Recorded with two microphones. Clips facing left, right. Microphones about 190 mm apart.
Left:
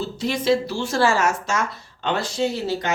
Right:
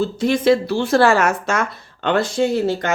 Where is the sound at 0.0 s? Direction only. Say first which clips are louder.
Right 7 dB; 50° right (ahead or behind).